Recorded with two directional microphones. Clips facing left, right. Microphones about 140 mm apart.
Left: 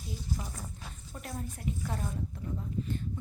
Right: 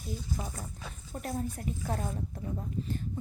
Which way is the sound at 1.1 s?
40° right (ahead or behind).